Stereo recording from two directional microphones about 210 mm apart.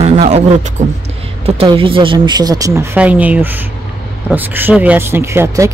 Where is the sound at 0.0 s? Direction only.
30° right (ahead or behind).